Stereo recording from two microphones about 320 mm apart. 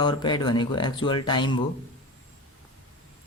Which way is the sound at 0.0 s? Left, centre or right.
Centre.